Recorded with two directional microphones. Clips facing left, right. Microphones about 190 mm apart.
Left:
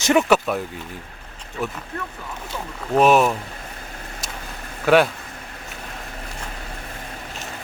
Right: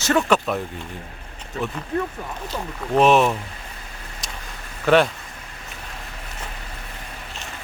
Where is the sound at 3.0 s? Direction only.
5° left (ahead or behind).